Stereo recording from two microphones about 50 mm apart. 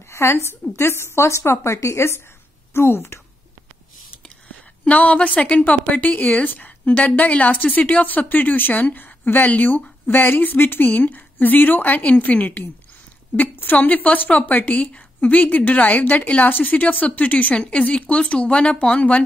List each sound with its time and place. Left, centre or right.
0.1 s a woman's voice: left
4.8 s speech: left